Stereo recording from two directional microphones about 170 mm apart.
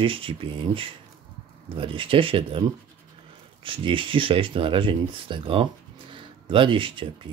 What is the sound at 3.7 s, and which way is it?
Speech, 30° right (ahead or behind).